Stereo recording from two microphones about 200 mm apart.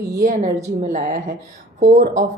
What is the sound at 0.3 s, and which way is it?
A woman's voice, 40° right (ahead or behind).